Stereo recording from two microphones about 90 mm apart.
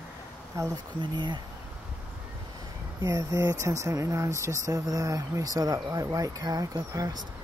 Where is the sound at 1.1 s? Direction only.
55° right (ahead or behind).